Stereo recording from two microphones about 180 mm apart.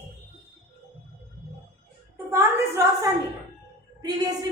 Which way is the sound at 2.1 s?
15° right (ahead or behind).